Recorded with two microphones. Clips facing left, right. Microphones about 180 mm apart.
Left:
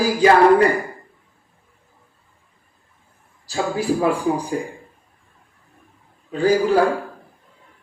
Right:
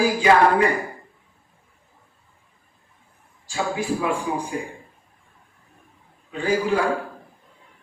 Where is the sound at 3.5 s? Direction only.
35° left (ahead or behind).